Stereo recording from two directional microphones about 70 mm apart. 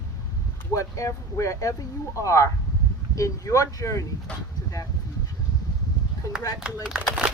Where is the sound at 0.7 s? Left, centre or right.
Left.